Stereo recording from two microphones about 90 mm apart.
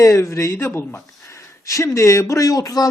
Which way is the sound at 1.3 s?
35° left (ahead or behind).